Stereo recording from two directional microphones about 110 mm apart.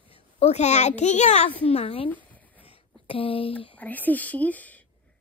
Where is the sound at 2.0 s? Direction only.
15° left (ahead or behind).